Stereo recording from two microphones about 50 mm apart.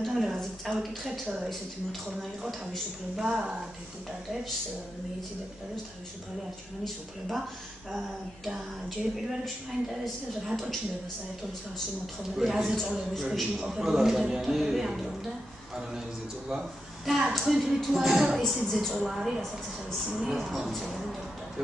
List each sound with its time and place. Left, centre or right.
0.0 s speech: centre
3.2 s a man's voice: centre
8.5 s speech: centre
12.4 s a man's voice: centre
16.4 s speech: centre